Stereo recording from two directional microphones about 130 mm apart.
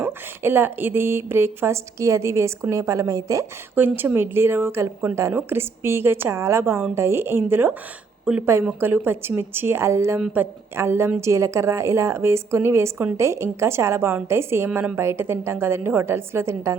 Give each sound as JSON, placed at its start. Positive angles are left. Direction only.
{"t": 0.0, "sound": "speech", "side_deg": -15}
{"t": 10.2, "sound": "speech", "side_deg": -10}